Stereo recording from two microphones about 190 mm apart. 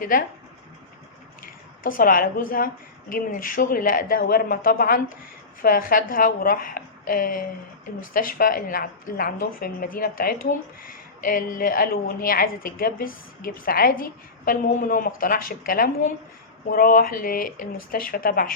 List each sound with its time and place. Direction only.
0.0 s speech: 50° left (ahead or behind)
1.4 s speech: 45° left (ahead or behind)